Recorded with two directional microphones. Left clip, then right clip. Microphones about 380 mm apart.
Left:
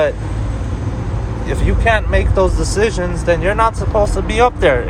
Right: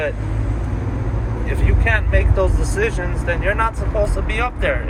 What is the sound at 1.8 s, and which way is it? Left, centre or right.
Speech, centre.